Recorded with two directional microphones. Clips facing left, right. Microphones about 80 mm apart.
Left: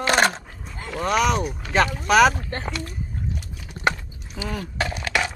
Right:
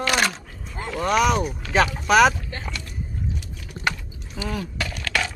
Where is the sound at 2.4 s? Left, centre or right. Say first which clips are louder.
Left 4 dB; left.